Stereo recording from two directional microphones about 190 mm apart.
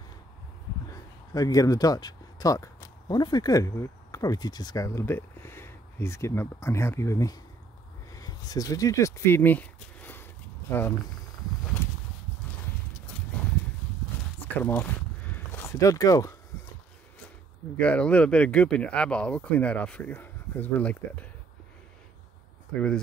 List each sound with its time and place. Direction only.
1.3 s speech: 20° left (ahead or behind)
14.6 s speech: 10° left (ahead or behind)
15.3 s a sound: 10° left (ahead or behind)
17.7 s speech: 5° left (ahead or behind)
22.8 s speech: 5° left (ahead or behind)